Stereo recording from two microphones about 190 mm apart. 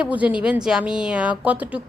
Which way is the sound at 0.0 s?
5° right (ahead or behind).